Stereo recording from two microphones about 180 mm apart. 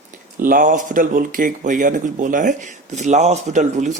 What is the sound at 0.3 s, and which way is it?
Speech, 50° right (ahead or behind).